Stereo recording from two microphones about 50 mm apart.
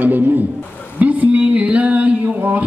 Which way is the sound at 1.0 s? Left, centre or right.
Right.